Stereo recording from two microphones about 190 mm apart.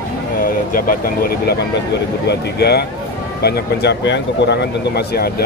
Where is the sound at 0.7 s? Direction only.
50° left (ahead or behind).